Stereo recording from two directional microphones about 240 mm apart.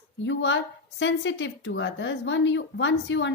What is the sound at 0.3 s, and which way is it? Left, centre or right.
A woman's voice, left.